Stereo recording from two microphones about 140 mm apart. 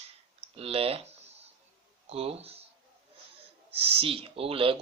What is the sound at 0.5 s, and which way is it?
Owl, 45° right (ahead or behind).